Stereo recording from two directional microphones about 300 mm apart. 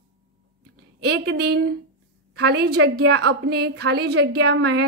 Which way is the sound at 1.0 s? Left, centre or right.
Right.